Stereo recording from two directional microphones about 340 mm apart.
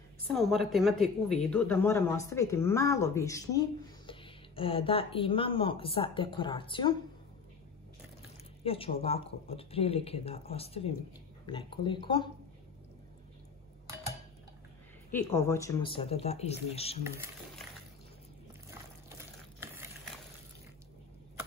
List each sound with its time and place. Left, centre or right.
0.3 s speech: centre
8.6 s speech: centre
15.3 s speech: centre
17.0 s speech: centre
18.7 s a sound: centre